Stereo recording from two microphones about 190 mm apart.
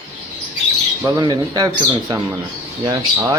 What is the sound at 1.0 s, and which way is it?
Speech, 20° right (ahead or behind).